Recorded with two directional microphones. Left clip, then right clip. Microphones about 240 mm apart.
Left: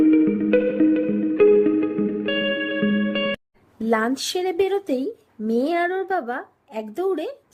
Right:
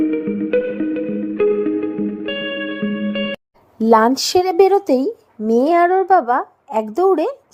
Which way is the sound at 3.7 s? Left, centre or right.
Centre.